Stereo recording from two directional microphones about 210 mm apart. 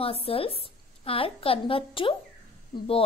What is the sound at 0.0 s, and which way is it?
A woman's voice, 25° left (ahead or behind).